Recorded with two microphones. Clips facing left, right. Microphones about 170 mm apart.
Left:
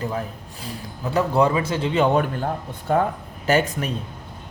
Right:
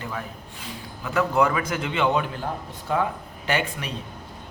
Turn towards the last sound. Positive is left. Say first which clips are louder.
# left 6 dB
turn(degrees=40)  # may be behind; listen again after turning